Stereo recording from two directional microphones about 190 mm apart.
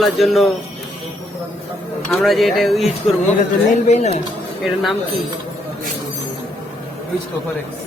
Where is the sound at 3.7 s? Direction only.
35° left (ahead or behind).